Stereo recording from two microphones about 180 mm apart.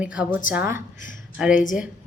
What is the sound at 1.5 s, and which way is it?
Speech, 45° left (ahead or behind).